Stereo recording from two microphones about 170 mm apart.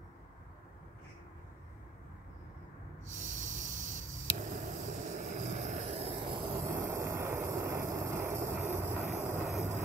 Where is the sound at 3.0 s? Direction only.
45° right (ahead or behind).